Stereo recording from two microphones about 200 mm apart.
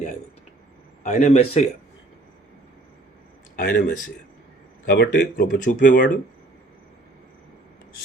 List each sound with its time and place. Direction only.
1.0 s a man's voice: 35° left (ahead or behind)
3.5 s speech: 40° left (ahead or behind)